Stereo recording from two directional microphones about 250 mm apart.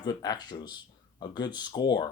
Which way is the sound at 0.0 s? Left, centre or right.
Centre.